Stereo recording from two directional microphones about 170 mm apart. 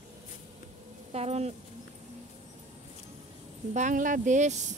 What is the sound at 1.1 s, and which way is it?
Speech, 40° right (ahead or behind).